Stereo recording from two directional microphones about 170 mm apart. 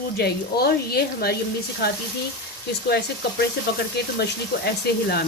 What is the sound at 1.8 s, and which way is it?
A woman's voice, 80° left.